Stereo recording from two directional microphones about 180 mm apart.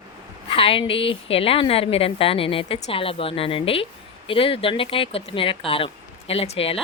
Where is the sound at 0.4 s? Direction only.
30° left (ahead or behind).